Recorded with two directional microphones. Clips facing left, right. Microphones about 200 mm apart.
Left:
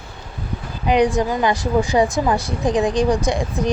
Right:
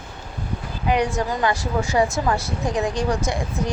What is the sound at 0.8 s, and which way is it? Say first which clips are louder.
A woman's voice: left 5 dB; 20° left (ahead or behind).